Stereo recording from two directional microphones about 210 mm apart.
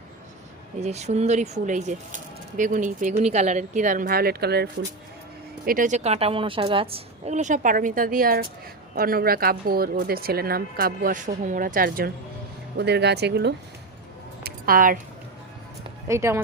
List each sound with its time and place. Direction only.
0.8 s speech: 30° right (ahead or behind); by 4.7 s 50° right (ahead or behind)
5.6 s speech: 40° right (ahead or behind)
12.7 s speech: 55° right (ahead or behind)
14.4 s a sound: 40° right (ahead or behind)
16.0 s speech: 15° right (ahead or behind)